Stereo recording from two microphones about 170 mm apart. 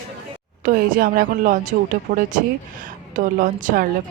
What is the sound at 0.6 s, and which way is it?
A woman's voice, 50° right (ahead or behind).